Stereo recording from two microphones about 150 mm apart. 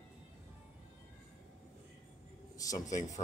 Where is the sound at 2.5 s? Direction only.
25° left (ahead or behind).